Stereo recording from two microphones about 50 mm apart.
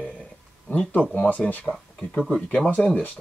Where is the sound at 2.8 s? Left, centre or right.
Left.